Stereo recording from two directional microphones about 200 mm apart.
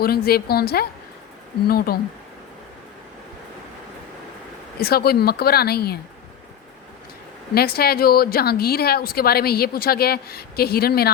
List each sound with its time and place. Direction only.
0.0 s a woman's voice: 50° left (ahead or behind)
4.8 s a woman's voice: 50° left (ahead or behind)
7.5 s a woman's voice: 50° left (ahead or behind)